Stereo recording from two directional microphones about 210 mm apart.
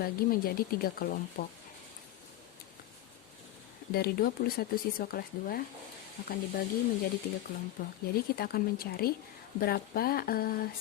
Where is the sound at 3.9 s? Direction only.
45° left (ahead or behind).